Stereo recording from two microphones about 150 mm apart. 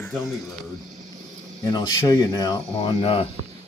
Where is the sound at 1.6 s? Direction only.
25° left (ahead or behind).